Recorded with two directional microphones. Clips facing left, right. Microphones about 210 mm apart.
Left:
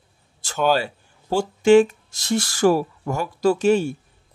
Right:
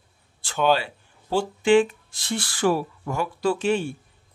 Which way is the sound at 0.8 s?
45° left (ahead or behind).